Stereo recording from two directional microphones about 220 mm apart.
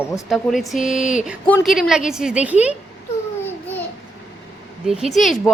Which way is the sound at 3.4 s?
10° left (ahead or behind).